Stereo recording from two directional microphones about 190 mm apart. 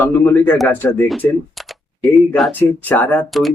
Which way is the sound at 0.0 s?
10° left (ahead or behind).